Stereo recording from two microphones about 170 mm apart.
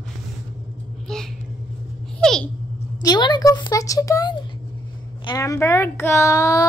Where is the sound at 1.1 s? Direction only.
5° left (ahead or behind).